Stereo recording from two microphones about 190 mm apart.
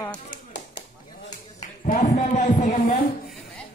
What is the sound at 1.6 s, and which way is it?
Clapping, 40° left (ahead or behind).